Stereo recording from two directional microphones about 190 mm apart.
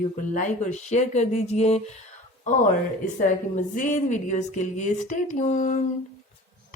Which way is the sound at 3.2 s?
40° left (ahead or behind).